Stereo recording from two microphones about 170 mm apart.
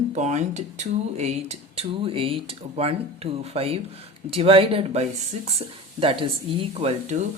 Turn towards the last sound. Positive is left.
turn(degrees=-40)  # may be behind; listen again after turning